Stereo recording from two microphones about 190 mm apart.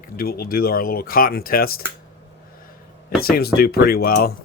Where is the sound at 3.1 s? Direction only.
50° left (ahead or behind).